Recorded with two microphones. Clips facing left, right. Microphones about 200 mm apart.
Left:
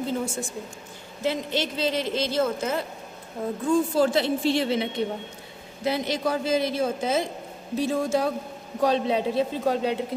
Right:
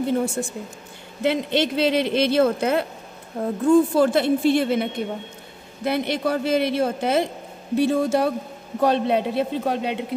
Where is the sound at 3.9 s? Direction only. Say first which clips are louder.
Right 4 dB; 55° right (ahead or behind).